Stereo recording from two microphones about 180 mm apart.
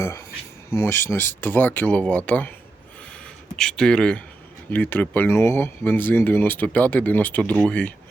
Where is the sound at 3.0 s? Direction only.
5° left (ahead or behind).